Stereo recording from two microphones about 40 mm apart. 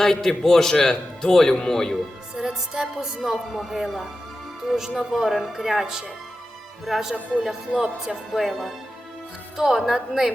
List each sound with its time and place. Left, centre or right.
0.0 s a man's voice: centre
2.4 s speech: centre
4.8 s speech: centre
7.7 s speech: centre
8.3 s speech: centre